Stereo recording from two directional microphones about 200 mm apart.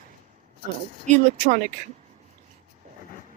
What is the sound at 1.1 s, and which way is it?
Speech, 40° right (ahead or behind).